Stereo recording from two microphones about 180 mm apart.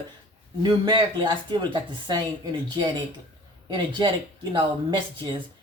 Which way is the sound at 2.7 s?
25° right (ahead or behind).